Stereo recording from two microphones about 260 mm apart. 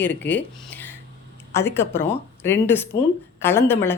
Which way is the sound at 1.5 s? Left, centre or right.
Centre.